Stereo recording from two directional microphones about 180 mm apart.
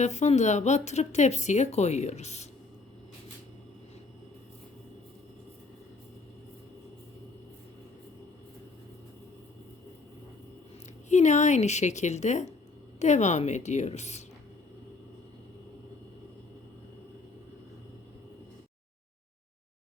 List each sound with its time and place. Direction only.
0.0 s speech: 40° left (ahead or behind)
11.1 s speech: 40° left (ahead or behind)